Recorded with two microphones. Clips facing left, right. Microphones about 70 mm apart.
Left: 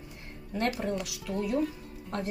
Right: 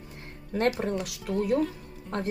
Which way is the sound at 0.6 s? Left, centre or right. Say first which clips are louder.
Right 4 dB; right.